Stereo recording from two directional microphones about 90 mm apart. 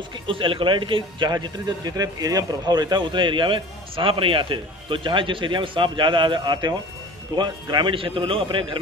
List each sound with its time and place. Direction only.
0.3 s a man's voice: 75° right (ahead or behind)
1.3 s speech: 45° right (ahead or behind)
7.9 s a man's voice: 75° right (ahead or behind)